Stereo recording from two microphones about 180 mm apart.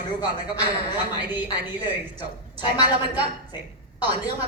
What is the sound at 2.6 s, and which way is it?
Speech, 25° left (ahead or behind).